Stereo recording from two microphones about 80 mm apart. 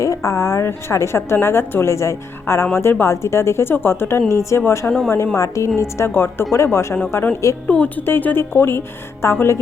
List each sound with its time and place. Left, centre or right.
0.0 s a woman's voice: left
7.7 s a woman's voice: centre